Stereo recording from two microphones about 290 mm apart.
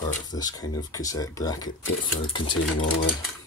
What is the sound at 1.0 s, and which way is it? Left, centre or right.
Speech, centre.